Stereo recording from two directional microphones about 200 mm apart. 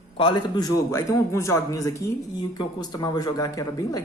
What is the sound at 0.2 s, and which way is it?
A man's voice, 25° left (ahead or behind).